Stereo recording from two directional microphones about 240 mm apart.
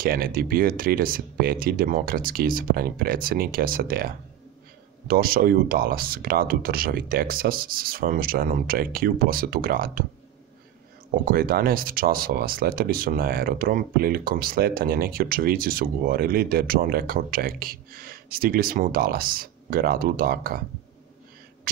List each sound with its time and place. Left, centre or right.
0.0 s speech: right
11.2 s speech: right